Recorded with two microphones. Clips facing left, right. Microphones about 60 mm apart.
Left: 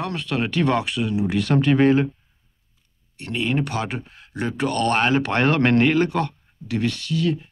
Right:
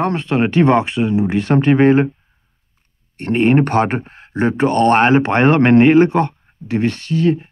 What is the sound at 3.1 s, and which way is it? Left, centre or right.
Speech, right.